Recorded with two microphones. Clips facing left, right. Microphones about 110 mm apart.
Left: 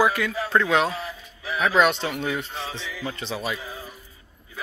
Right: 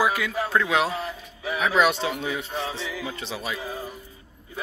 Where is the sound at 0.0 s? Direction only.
5° right (ahead or behind).